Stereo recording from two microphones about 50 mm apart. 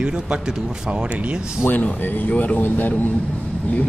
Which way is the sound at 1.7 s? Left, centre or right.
Left.